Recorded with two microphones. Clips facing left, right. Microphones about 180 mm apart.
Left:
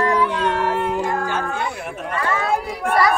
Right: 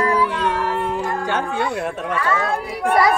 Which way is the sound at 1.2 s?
75° right (ahead or behind).